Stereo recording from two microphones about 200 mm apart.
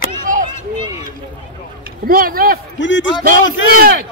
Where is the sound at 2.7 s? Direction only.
65° left (ahead or behind).